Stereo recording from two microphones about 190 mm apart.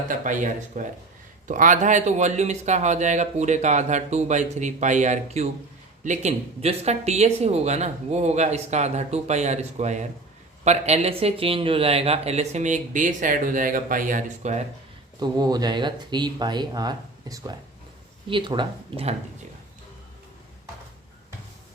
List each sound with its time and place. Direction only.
0.1 s speech: 40° right (ahead or behind)
15.2 s speech: 20° right (ahead or behind)